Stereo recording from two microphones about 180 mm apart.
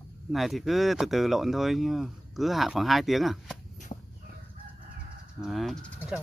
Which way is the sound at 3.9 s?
40° left (ahead or behind).